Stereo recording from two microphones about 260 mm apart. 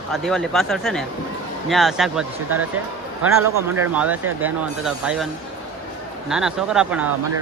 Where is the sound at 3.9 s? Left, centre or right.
Centre.